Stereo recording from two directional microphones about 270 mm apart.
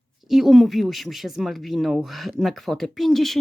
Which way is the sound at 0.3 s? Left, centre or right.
Centre.